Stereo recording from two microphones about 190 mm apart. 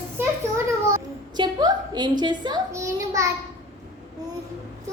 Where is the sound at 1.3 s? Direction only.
20° right (ahead or behind).